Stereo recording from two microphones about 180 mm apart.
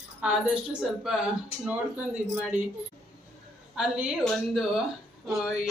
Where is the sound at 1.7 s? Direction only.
10° right (ahead or behind).